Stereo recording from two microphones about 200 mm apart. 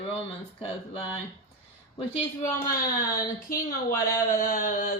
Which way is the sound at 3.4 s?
45° left (ahead or behind).